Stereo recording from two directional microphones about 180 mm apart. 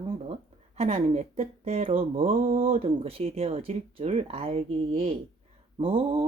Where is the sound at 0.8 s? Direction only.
35° right (ahead or behind).